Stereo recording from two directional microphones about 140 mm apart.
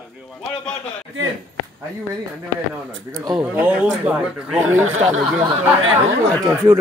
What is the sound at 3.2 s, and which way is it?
Speech, 25° right (ahead or behind).